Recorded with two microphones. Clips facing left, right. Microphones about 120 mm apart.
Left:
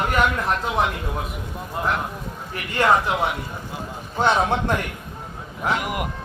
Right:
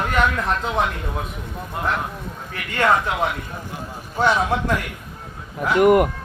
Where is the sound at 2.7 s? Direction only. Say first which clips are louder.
Even; 15° left (ahead or behind).